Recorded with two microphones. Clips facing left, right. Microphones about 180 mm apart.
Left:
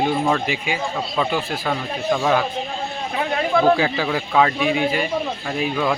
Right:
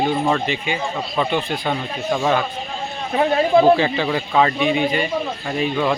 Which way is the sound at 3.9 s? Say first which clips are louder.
Right 1 dB; centre (ahead or behind).